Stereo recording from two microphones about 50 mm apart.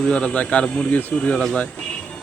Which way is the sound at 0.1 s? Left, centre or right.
Left.